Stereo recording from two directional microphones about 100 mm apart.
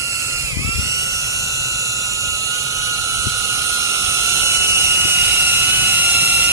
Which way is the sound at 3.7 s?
30° right (ahead or behind).